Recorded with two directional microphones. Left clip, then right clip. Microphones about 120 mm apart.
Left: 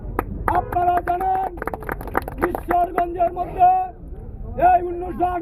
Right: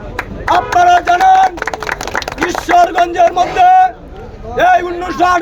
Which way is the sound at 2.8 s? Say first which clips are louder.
Right 11 dB; 40° right (ahead or behind).